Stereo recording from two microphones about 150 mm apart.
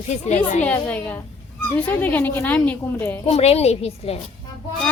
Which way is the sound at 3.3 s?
45° left (ahead or behind).